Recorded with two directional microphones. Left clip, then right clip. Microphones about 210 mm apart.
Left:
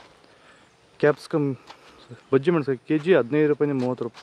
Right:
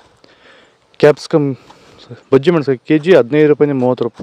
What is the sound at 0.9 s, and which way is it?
Speech, 40° right (ahead or behind).